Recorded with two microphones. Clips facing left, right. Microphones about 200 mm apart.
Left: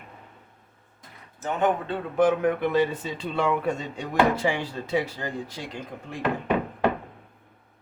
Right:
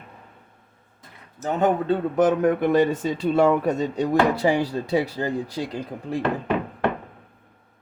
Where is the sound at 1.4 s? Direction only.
40° right (ahead or behind).